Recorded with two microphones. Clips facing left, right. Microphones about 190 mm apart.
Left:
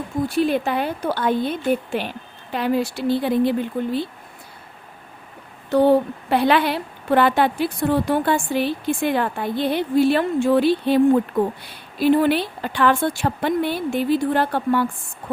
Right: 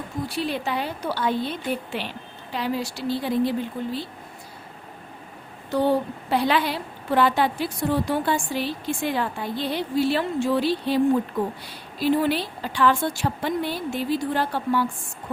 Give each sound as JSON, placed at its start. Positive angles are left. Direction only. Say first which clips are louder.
{"t": 0.3, "sound": "a woman's voice", "louder": "left 7 dB", "side_deg": 50}
{"t": 5.7, "sound": "a woman's voice", "louder": "left 6 dB", "side_deg": 60}